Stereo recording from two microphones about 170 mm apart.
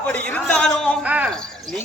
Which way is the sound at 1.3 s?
5° left (ahead or behind).